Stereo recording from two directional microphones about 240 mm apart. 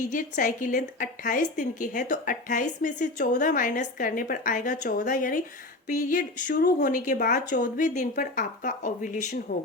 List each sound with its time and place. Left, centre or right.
0.1 s a woman's voice: left